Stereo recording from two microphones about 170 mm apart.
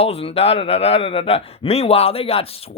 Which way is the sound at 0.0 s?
35° left (ahead or behind).